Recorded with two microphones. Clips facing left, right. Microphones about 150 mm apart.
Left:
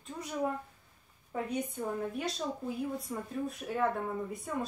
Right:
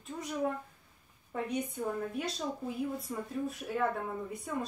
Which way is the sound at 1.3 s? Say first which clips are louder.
Even; centre (ahead or behind).